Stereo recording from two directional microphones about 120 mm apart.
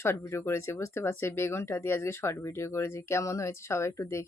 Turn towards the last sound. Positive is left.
turn(degrees=25)  # may be behind; listen again after turning